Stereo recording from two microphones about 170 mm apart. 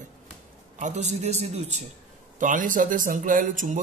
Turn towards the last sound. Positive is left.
turn(degrees=-50)  # may be behind; listen again after turning